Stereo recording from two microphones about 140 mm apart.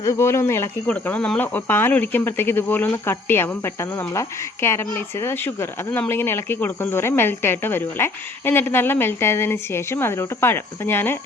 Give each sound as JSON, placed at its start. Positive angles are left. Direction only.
{"t": 0.0, "sound": "speech", "side_deg": 20}